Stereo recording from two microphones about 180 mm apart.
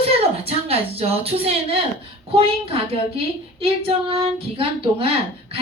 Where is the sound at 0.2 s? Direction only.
35° right (ahead or behind).